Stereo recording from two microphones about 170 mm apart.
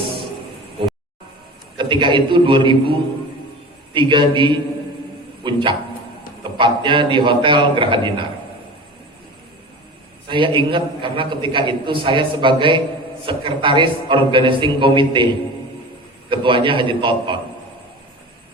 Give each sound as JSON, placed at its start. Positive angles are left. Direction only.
{"t": 0.8, "sound": "music", "side_deg": -30}
{"t": 1.8, "sound": "a man's voice", "side_deg": -30}
{"t": 3.9, "sound": "a man's voice", "side_deg": -30}
{"t": 10.2, "sound": "a man's voice", "side_deg": -30}